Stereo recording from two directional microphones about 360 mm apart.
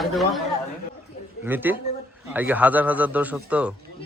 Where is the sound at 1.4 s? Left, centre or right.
Centre.